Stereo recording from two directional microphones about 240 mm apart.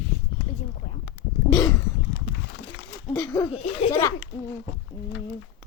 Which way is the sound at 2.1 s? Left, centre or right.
Left.